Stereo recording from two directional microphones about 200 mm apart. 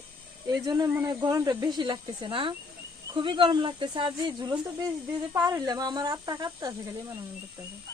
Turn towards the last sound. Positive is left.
turn(degrees=-15)  # may be behind; listen again after turning